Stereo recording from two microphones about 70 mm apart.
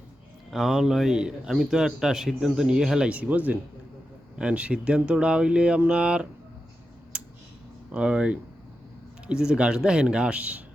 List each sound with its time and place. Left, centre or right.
0.5 s speech: centre
3.1 s speech: centre
7.1 s a sound: centre
7.9 s speech: centre